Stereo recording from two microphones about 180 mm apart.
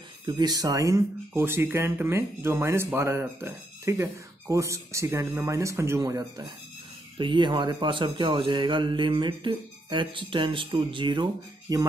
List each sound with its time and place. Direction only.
0.4 s speech: 20° right (ahead or behind)